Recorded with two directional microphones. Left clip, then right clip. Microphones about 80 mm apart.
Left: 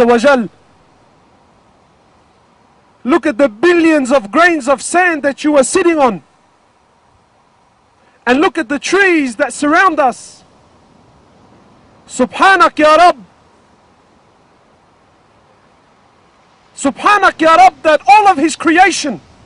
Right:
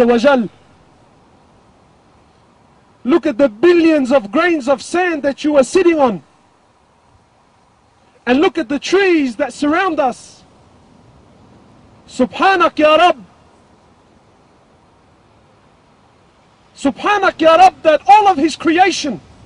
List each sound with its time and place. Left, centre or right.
0.0 s a man's voice: left
3.0 s a man's voice: left
8.2 s a man's voice: left
12.1 s a man's voice: left
16.7 s a man's voice: left